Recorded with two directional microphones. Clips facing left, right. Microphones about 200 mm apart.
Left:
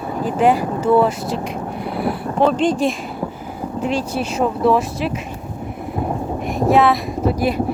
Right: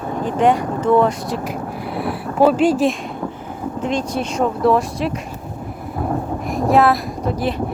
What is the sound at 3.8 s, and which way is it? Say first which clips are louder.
Speech: even; 10° left (ahead or behind).